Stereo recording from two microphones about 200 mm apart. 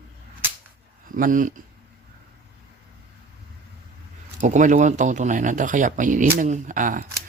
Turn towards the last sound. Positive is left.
turn(degrees=-40)  # may be behind; listen again after turning